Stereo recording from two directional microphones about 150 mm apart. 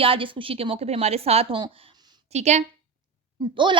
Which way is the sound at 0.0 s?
35° right (ahead or behind).